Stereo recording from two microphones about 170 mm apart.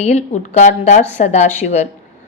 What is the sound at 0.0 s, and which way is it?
A woman's voice, 45° left (ahead or behind).